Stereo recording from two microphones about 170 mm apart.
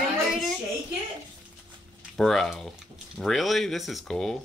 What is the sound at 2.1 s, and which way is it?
Speech, centre (ahead or behind).